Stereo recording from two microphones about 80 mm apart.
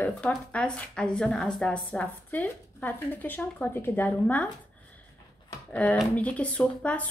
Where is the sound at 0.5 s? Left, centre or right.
Centre.